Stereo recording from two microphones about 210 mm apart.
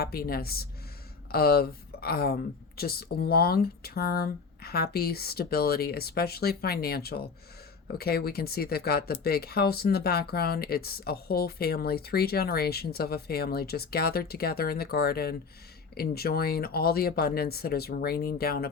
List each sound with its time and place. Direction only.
0.0 s speech: 45° left (ahead or behind)